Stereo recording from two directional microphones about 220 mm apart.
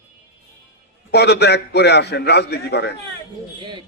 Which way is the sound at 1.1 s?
50° left (ahead or behind).